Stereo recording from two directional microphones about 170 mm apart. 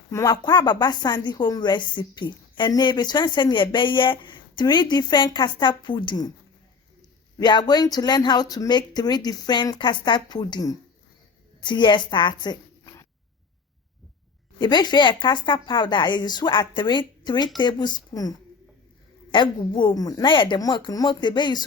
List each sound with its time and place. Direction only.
0.1 s a woman's voice: 20° left (ahead or behind)
7.3 s a woman's voice: 25° left (ahead or behind)
14.6 s a woman's voice: 25° left (ahead or behind)